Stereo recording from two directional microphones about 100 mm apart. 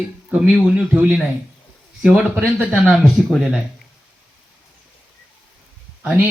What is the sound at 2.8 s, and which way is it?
Speech, centre (ahead or behind).